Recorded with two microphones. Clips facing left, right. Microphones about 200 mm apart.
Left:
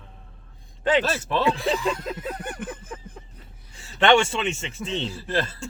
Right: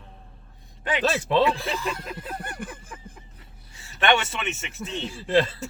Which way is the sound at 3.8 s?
25° left (ahead or behind).